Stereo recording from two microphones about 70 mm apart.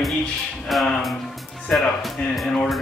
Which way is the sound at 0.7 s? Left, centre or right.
Centre.